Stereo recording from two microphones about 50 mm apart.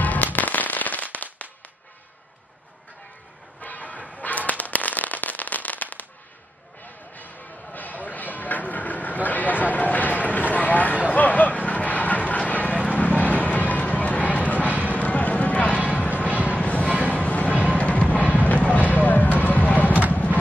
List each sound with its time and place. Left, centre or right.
0.0 s firecracker: left
3.6 s firecracker: left
7.2 s train: left
10.5 s a sound: left
14.9 s music: left
16.3 s train: right
16.5 s a sound: left
17.1 s music: left
18.3 s a sound: left